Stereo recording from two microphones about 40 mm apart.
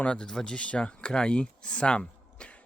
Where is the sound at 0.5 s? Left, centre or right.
Left.